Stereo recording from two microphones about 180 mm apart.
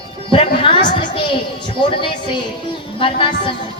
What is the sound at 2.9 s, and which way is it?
Speech, 30° left (ahead or behind).